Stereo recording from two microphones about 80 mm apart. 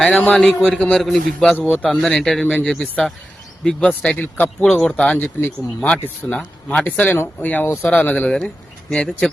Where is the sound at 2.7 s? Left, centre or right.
Centre.